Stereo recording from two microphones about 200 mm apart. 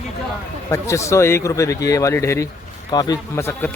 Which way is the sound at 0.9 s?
15° left (ahead or behind).